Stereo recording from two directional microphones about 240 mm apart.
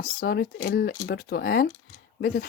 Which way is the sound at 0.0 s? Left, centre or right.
Left.